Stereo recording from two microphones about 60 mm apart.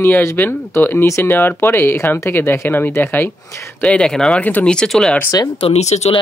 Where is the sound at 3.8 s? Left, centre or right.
Centre.